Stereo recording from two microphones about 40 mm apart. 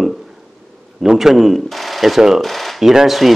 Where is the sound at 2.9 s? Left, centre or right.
Centre.